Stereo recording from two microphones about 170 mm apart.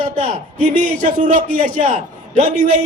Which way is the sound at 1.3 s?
50° right (ahead or behind).